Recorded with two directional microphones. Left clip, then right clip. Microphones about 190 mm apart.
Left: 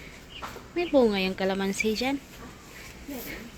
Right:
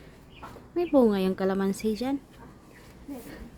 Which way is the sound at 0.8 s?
35° right (ahead or behind).